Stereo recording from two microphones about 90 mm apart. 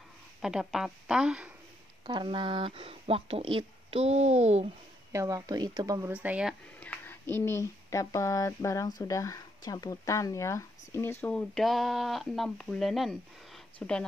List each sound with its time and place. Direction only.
0.4 s a woman's voice: 5° right (ahead or behind)
2.0 s speech: 65° right (ahead or behind); by 4.0 s 85° right
5.1 s speech: 40° right (ahead or behind)
6.1 s a woman's voice: 15° right (ahead or behind)
6.8 s speech: 20° left (ahead or behind)
11.3 s speech: centre (ahead or behind)